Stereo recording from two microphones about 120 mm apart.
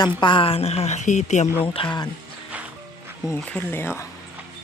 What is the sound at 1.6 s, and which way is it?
Speech, 50° left (ahead or behind).